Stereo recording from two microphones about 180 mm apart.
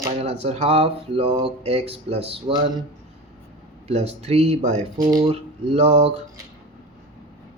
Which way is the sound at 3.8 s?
35° right (ahead or behind).